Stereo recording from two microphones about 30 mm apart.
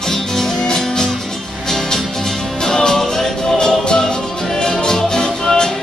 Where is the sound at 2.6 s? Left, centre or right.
Centre.